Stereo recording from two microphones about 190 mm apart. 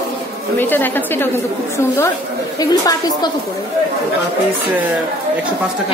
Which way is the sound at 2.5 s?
20° left (ahead or behind).